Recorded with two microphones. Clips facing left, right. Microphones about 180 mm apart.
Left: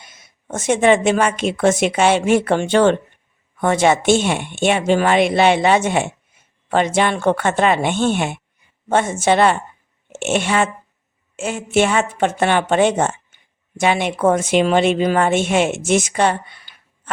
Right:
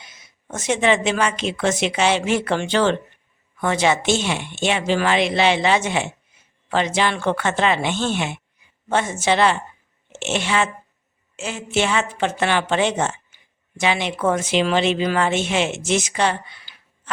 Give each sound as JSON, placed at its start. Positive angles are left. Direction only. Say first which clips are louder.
{"t": 0.0, "sound": "a woman's voice", "louder": "left 1 dB", "side_deg": 50}